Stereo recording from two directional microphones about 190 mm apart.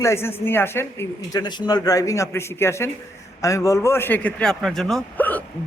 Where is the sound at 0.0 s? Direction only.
15° left (ahead or behind).